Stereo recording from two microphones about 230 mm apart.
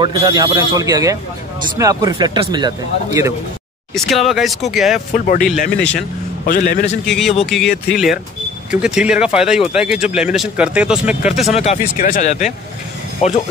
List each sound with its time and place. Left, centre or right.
0.0 s speech: centre
3.9 s speech: centre
5.1 s speech: left
5.8 s speech: centre
6.4 s speech: left
7.1 s speech: centre
11.5 s speech: left